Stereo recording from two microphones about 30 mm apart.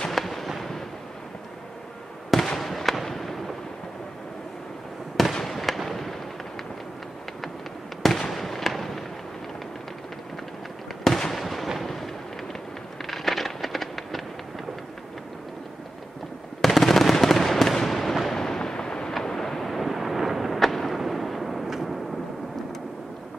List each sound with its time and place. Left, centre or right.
0.1 s fireworks: centre
2.3 s fireworks: centre
5.1 s fireworks: centre
8.0 s fireworks: centre
11.3 s fireworks: centre
13.0 s a sound: centre
16.6 s fireworks: centre
18.3 s fireworks: centre
19.2 s vehicle: centre
19.7 s a sound: centre